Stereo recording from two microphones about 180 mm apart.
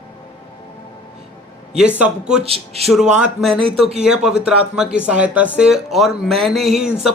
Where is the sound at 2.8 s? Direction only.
Centre (ahead or behind).